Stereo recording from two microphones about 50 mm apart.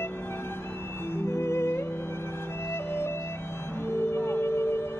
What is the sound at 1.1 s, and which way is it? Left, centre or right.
Music, left.